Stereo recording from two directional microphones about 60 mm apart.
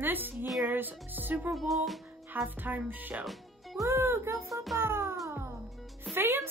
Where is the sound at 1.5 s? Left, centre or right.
Centre.